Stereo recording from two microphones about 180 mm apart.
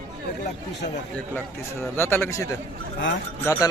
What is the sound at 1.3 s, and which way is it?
A man's voice, 15° left (ahead or behind).